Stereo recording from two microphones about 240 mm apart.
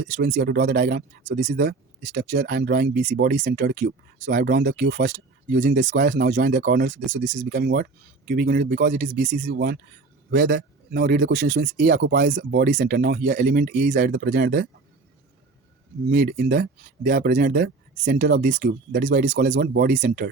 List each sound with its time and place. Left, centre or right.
0.1 s speech: right
9.5 s speech: right
16.0 s speech: right